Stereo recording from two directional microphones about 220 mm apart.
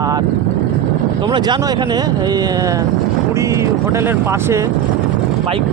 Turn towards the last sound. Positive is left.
turn(degrees=-10)  # may be behind; listen again after turning